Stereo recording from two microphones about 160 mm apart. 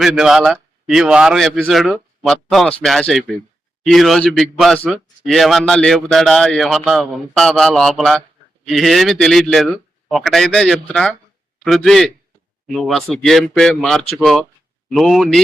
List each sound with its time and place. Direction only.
0.0 s a man's voice: 5° right (ahead or behind)